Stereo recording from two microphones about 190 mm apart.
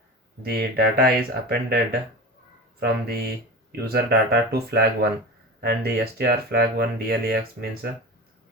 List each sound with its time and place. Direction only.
0.4 s speech: 55° right (ahead or behind)